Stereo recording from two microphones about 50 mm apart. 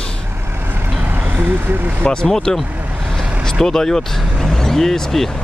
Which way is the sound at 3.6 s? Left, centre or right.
Centre.